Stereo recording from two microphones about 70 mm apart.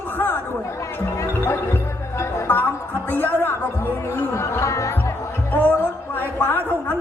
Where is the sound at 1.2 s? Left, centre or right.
Left.